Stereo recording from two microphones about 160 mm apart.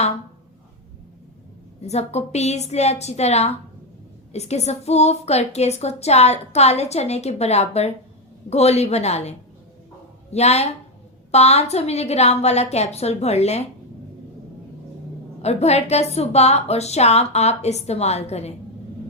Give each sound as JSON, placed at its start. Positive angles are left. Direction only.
{"t": 1.8, "sound": "a woman's voice", "side_deg": 40}
{"t": 10.3, "sound": "a woman's voice", "side_deg": 40}
{"t": 15.4, "sound": "a woman's voice", "side_deg": 40}